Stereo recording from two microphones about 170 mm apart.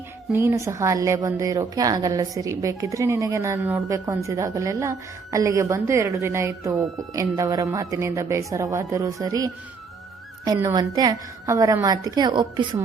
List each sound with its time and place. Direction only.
0.3 s a woman's voice: 15° right (ahead or behind)